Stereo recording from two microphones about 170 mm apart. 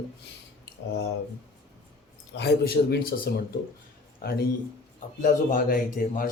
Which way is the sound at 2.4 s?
70° left (ahead or behind).